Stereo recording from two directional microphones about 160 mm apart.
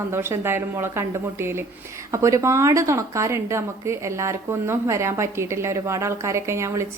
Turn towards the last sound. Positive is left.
turn(degrees=-15)  # may be behind; listen again after turning